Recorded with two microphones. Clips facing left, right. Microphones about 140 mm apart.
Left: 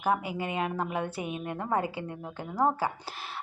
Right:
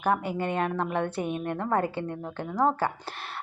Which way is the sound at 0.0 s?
5° left (ahead or behind).